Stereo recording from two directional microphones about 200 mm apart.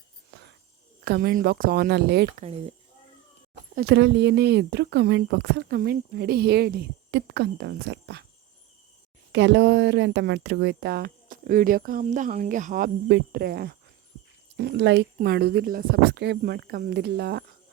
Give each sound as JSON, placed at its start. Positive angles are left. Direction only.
{"t": 0.3, "sound": "a sound", "side_deg": -60}
{"t": 1.0, "sound": "speech", "side_deg": -50}
{"t": 2.3, "sound": "speech", "side_deg": -30}
{"t": 3.8, "sound": "speech", "side_deg": -60}
{"t": 9.3, "sound": "speech", "side_deg": -60}
{"t": 13.1, "sound": "speech", "side_deg": -55}